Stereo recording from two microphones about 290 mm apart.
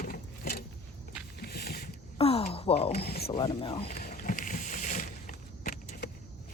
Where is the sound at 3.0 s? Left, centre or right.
Left.